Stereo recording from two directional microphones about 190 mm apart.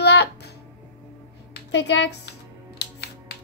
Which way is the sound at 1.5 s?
65° left (ahead or behind).